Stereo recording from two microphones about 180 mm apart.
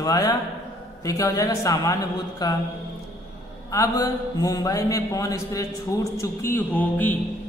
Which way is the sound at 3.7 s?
20° left (ahead or behind).